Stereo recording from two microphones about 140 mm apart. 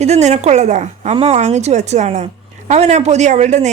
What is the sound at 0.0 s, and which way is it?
A woman's voice, 55° right (ahead or behind).